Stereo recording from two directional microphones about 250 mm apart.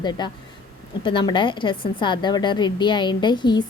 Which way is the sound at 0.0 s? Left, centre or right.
Centre.